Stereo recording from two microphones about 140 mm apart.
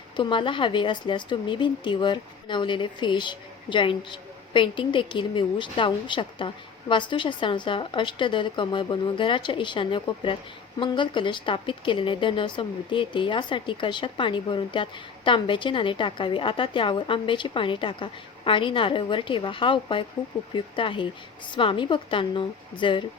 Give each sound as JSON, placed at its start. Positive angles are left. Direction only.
{"t": 0.2, "sound": "a woman's voice", "side_deg": 35}